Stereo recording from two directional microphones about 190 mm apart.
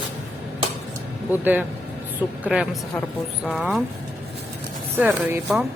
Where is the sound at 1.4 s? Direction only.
10° right (ahead or behind).